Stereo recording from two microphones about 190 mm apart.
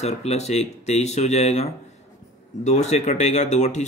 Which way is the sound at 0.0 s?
35° left (ahead or behind).